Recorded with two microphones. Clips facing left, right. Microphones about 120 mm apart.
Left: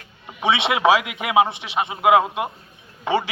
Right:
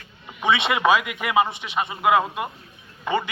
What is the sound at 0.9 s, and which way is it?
A man's voice, 90° left.